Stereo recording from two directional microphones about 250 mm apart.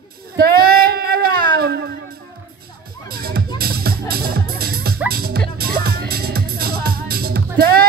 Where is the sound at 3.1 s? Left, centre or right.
Right.